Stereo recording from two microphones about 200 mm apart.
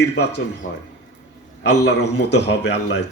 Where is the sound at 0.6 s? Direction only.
40° left (ahead or behind).